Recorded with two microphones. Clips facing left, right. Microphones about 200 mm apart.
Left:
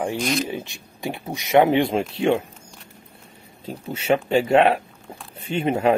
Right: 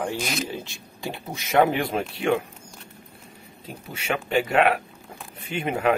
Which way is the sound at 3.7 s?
35° left (ahead or behind).